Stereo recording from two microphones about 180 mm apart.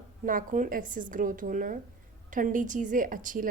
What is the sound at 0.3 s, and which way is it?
A woman's voice, 45° right (ahead or behind).